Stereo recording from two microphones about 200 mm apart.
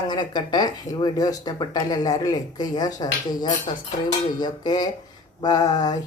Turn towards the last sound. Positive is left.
turn(degrees=20)  # may be behind; listen again after turning